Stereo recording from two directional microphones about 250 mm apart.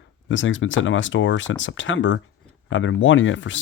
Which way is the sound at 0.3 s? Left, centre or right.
Left.